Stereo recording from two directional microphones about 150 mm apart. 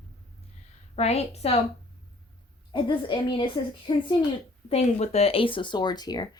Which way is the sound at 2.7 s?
30° left (ahead or behind).